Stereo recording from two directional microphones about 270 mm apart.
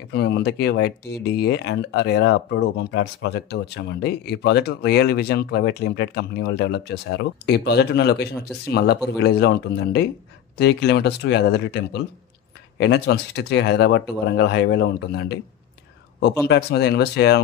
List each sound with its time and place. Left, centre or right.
0.1 s speech: left
16.4 s speech: left